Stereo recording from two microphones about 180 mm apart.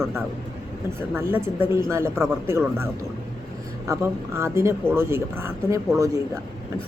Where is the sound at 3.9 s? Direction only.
15° right (ahead or behind).